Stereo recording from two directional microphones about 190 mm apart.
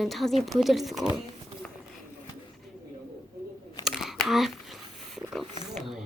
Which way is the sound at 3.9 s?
Centre (ahead or behind).